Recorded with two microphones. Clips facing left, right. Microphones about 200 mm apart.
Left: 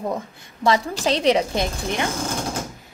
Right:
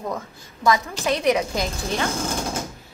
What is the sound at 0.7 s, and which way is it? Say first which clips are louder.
Speech: left 1 dB; 30° left (ahead or behind).